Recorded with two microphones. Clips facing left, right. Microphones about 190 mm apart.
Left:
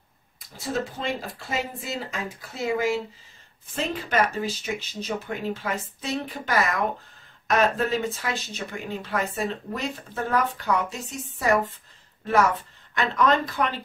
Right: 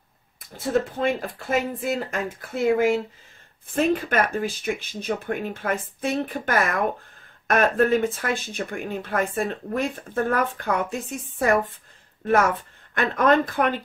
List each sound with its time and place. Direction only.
0.9 s speech: 55° right (ahead or behind)
12.9 s speech: 50° right (ahead or behind)